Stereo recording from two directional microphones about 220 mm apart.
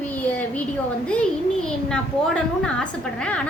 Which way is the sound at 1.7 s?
5° left (ahead or behind).